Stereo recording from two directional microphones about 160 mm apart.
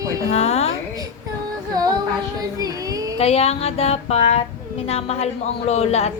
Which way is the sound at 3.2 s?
40° left (ahead or behind).